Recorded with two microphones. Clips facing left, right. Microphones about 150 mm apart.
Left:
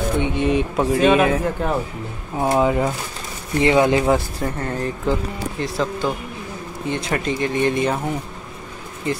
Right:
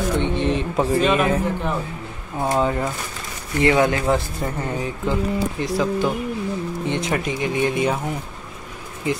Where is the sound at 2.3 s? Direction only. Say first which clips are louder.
Left 3 dB; 15° left (ahead or behind).